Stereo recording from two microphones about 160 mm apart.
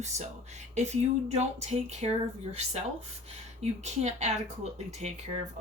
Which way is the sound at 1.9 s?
45° right (ahead or behind).